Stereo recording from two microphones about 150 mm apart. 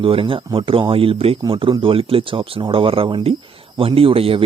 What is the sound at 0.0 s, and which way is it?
A man's voice, 35° right (ahead or behind).